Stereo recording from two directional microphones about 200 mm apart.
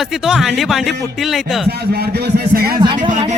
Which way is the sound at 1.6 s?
55° right (ahead or behind).